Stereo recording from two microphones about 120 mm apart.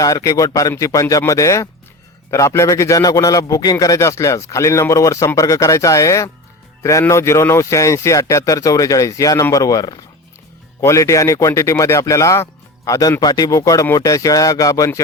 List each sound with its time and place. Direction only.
0.0 s a man's voice: 30° left (ahead or behind)